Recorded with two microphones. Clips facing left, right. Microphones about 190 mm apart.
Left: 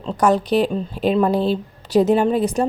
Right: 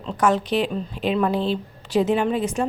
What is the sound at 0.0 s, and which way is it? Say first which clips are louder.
Speech: left 3 dB; 35° left (ahead or behind).